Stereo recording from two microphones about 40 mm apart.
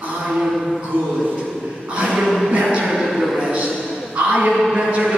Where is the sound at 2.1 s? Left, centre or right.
Centre.